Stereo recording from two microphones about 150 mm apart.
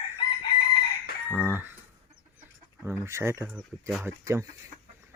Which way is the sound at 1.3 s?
15° right (ahead or behind).